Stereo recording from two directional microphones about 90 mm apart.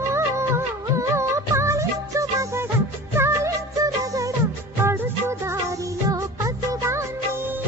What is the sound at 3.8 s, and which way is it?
Music, 40° right (ahead or behind).